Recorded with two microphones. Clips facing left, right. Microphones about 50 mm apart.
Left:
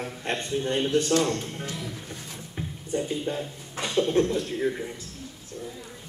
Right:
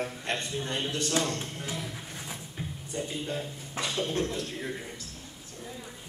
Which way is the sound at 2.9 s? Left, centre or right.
Centre.